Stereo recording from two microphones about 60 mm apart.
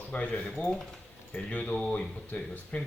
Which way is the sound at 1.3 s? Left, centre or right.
Left.